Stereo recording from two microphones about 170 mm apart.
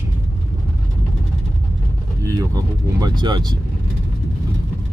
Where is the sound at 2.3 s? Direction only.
20° right (ahead or behind).